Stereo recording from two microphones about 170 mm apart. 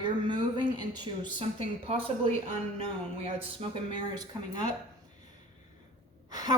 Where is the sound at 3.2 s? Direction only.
35° right (ahead or behind).